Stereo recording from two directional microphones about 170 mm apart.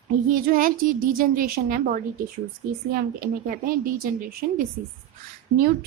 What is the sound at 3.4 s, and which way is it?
Speech, 55° right (ahead or behind).